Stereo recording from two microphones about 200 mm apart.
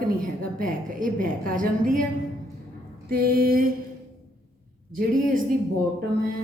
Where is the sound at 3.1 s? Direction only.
50° right (ahead or behind).